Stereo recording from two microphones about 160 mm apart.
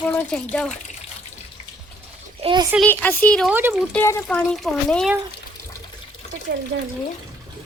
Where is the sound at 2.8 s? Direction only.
10° left (ahead or behind).